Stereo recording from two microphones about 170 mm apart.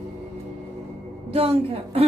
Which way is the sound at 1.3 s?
35° right (ahead or behind).